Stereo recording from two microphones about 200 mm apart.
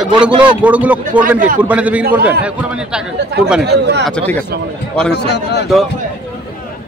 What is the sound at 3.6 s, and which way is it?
Speech, 55° right (ahead or behind).